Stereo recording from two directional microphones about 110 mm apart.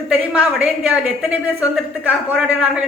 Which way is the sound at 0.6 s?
10° right (ahead or behind).